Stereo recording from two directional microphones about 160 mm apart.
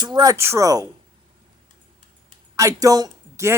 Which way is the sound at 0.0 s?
25° right (ahead or behind).